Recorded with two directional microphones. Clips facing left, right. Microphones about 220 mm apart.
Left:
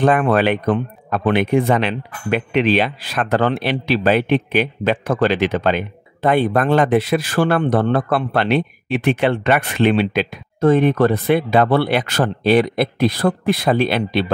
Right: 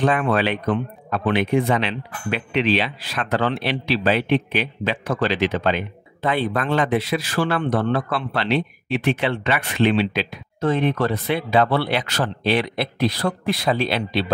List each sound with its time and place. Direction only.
0.0 s speech: 50° left (ahead or behind)